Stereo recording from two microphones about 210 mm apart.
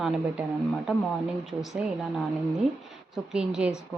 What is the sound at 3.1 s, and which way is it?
Speech, 5° right (ahead or behind).